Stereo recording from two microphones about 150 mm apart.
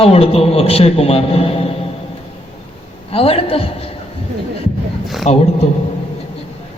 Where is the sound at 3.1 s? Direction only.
40° left (ahead or behind).